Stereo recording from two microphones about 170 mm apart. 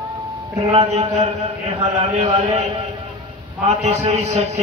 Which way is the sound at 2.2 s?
40° right (ahead or behind).